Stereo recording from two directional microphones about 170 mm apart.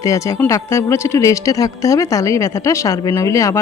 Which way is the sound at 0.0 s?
20° left (ahead or behind).